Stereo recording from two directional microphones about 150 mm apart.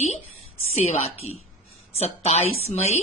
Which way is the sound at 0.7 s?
45° left (ahead or behind).